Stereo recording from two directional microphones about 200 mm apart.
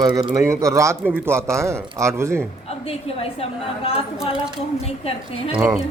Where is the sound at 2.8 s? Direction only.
30° left (ahead or behind).